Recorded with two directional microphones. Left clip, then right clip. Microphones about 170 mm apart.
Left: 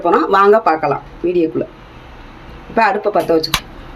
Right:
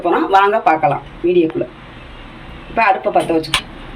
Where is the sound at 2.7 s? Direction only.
55° left (ahead or behind).